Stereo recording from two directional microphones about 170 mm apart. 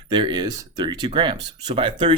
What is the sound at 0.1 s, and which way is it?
Speech, 25° right (ahead or behind).